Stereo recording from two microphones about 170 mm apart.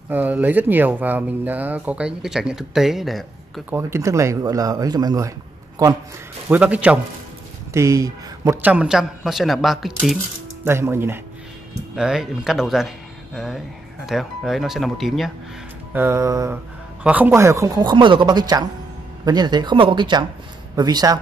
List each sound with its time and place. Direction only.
0.1 s speech: 10° right (ahead or behind)
3.7 s speech: 15° right (ahead or behind)
6.5 s speech: 10° right (ahead or behind)
7.7 s a man's voice: 20° right (ahead or behind); by 10.1 s centre (ahead or behind)
10.6 s speech: 15° right (ahead or behind)
11.9 s a man's voice: 5° right (ahead or behind)
15.9 s speech: 15° right (ahead or behind)